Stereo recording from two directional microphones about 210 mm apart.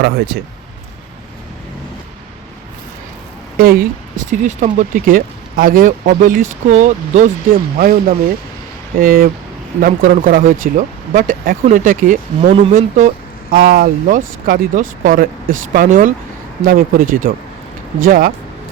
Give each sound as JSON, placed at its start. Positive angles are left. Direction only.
{"t": 0.0, "sound": "speech", "side_deg": -50}
{"t": 3.6, "sound": "speech", "side_deg": -45}